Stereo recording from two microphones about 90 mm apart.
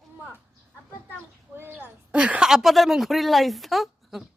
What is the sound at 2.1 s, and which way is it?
A woman's voice, 10° right (ahead or behind).